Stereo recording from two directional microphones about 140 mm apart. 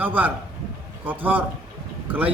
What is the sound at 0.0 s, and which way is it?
A man's voice, 15° right (ahead or behind).